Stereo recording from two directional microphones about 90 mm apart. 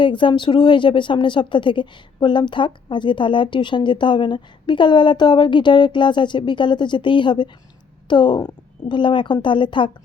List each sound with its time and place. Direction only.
0.0 s speech: 65° left (ahead or behind)